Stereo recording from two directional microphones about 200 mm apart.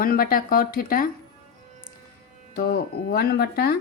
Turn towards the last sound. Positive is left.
turn(degrees=50)  # may be behind; listen again after turning